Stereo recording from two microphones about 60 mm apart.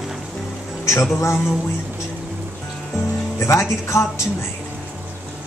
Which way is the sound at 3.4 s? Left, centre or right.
Left.